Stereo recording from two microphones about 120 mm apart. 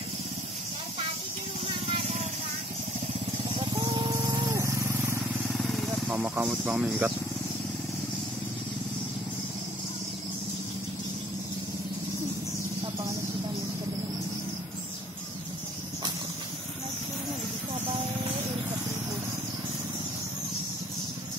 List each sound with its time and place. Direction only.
1.9 s vehicle: 65° right (ahead or behind)
3.4 s vehicle: 40° right (ahead or behind)
5.5 s vehicle: centre (ahead or behind)
6.0 s speech: 15° right (ahead or behind)